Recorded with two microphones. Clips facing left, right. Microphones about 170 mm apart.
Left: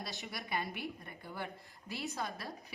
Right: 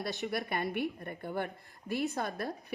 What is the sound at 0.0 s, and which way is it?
A woman's voice, 60° right (ahead or behind).